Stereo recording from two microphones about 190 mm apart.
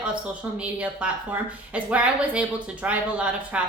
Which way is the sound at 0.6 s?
5° right (ahead or behind).